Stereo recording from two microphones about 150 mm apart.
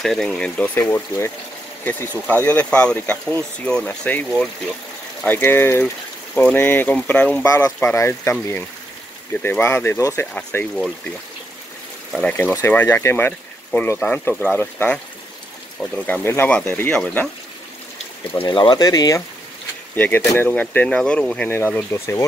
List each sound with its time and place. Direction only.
0.0 s speech: 5° left (ahead or behind)
7.4 s speech: 25° left (ahead or behind)
12.3 s speech: 10° left (ahead or behind)
18.4 s speech: 30° left (ahead or behind)
20.3 s speech: 10° left (ahead or behind)